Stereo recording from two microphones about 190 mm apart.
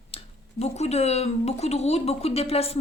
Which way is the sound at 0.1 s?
30° left (ahead or behind).